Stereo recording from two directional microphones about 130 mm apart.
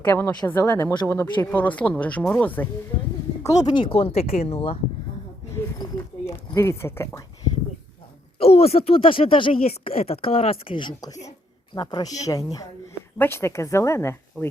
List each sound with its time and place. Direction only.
0.0 s speech: 15° left (ahead or behind)
3.4 s speech: 30° left (ahead or behind); by 4.8 s 50° left (ahead or behind)
5.5 s a sound: 25° left (ahead or behind)
8.4 s a woman's voice: 50° left (ahead or behind); by 12.6 s 25° left (ahead or behind)
13.1 s a woman's voice: 15° left (ahead or behind)